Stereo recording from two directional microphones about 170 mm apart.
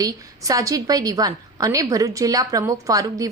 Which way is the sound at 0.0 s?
20° right (ahead or behind).